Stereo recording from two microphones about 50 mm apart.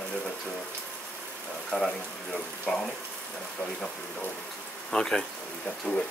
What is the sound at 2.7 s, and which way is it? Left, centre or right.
Speech, centre.